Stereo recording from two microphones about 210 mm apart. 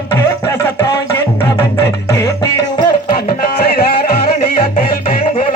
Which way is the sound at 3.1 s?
45° left (ahead or behind).